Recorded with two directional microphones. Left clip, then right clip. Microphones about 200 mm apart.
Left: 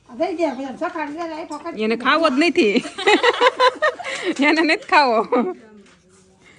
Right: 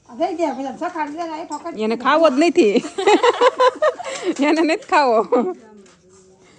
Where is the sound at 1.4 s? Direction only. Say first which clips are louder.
Left 1 dB; 15° right (ahead or behind).